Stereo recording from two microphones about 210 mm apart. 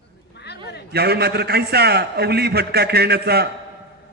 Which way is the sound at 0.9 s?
50° right (ahead or behind).